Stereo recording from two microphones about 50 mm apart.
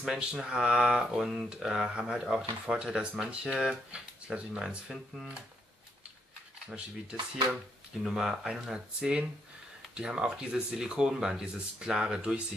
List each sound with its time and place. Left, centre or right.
0.0 s mantra: centre
0.3 s speech: centre
8.0 s speech: centre